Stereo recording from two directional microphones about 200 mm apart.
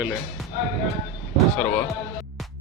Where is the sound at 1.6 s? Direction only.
5° left (ahead or behind).